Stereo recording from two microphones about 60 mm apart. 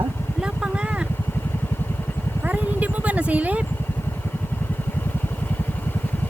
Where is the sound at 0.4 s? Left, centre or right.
Centre.